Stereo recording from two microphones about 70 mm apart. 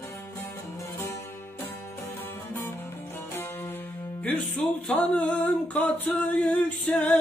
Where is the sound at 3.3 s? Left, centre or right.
Left.